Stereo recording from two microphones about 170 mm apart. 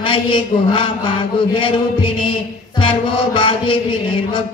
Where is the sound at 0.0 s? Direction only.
30° left (ahead or behind).